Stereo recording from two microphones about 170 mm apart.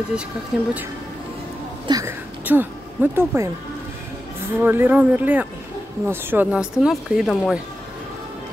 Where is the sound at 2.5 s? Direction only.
10° right (ahead or behind).